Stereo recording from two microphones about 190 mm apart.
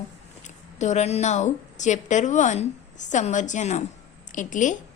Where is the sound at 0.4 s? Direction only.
40° left (ahead or behind).